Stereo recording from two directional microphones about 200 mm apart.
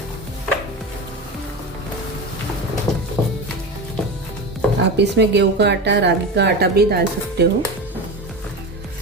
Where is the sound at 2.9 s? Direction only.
Centre (ahead or behind).